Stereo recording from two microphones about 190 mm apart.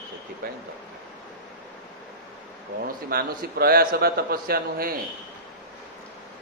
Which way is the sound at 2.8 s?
55° right (ahead or behind).